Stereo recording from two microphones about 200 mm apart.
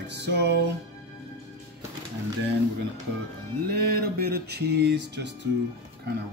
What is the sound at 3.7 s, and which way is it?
Music, 50° right (ahead or behind).